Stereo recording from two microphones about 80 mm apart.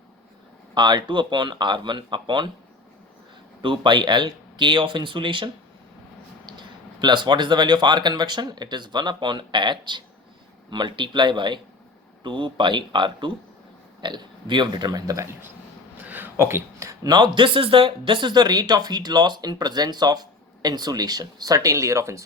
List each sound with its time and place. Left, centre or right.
0.7 s speech: right
3.6 s speech: right
6.4 s speech: right
12.2 s speech: right
16.0 s a sound: right
16.9 s speech: right